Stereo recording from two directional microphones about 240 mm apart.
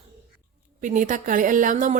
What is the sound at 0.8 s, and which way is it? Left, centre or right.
Speech, right.